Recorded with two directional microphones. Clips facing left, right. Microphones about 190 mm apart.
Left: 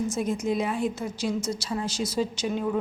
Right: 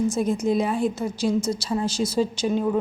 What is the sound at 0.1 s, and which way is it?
A woman's voice, 30° right (ahead or behind).